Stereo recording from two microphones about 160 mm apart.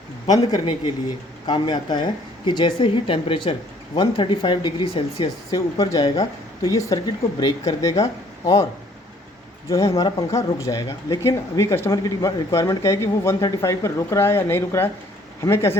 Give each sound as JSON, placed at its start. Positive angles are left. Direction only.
{"t": 0.3, "sound": "speech", "side_deg": 25}
{"t": 9.6, "sound": "speech", "side_deg": 20}